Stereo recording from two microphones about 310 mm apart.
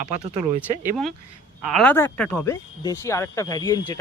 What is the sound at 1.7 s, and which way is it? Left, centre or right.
Speech, centre.